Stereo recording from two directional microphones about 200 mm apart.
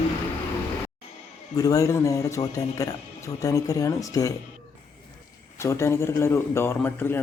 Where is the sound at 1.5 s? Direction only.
20° left (ahead or behind).